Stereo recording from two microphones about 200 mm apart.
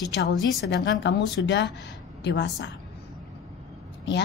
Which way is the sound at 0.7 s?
60° left (ahead or behind).